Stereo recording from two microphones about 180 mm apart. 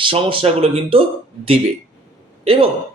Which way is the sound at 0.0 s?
30° right (ahead or behind).